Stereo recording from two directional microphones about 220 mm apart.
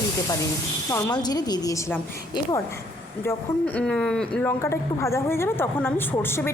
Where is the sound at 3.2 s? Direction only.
5° left (ahead or behind).